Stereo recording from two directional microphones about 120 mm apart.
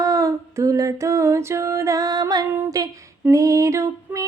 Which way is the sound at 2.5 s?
30° right (ahead or behind).